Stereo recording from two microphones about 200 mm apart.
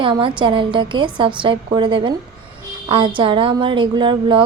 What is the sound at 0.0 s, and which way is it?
A woman's voice, 25° right (ahead or behind).